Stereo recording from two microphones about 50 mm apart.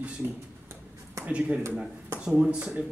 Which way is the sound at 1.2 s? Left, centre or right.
Right.